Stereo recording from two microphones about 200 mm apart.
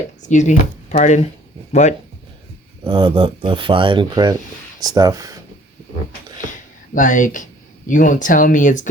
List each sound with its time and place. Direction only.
0.3 s speech: 35° left (ahead or behind)
2.8 s speech: 25° right (ahead or behind)
6.4 s a sound: 40° left (ahead or behind)
7.9 s speech: 40° left (ahead or behind)